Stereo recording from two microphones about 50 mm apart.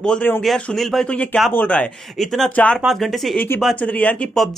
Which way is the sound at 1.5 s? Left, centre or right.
Left.